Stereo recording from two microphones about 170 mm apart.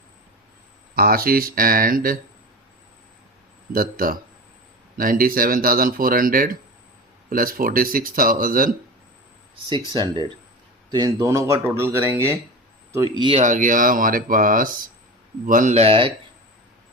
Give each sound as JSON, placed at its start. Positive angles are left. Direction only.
{"t": 0.9, "sound": "speech", "side_deg": -60}
{"t": 3.7, "sound": "speech", "side_deg": -55}
{"t": 9.9, "sound": "speech", "side_deg": -30}
{"t": 13.4, "sound": "speech", "side_deg": -50}